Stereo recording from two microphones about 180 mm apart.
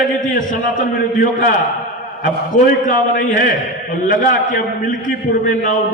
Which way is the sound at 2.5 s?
45° left (ahead or behind).